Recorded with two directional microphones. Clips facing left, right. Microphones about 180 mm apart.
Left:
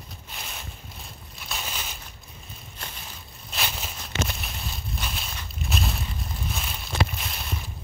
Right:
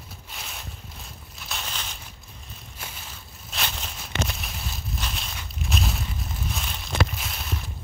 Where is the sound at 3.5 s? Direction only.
5° left (ahead or behind).